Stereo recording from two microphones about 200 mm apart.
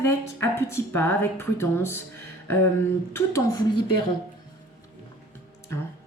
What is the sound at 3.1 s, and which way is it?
Speech, 15° left (ahead or behind).